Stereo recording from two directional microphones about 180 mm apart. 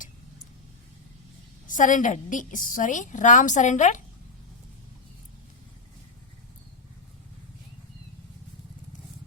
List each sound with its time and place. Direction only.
1.6 s a woman's voice: 45° left (ahead or behind)